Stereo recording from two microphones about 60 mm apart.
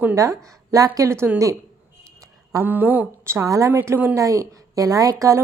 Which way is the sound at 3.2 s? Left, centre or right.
Right.